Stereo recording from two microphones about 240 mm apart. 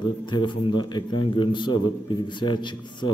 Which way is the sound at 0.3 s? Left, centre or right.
Centre.